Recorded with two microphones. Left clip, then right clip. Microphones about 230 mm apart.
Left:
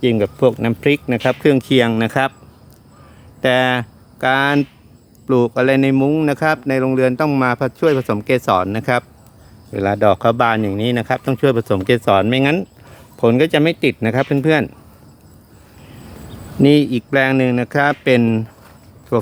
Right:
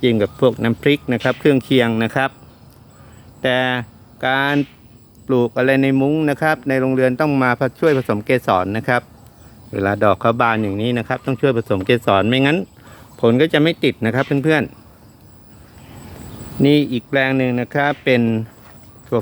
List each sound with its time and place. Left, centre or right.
0.0 s speech: centre
3.4 s speech: left
16.6 s speech: left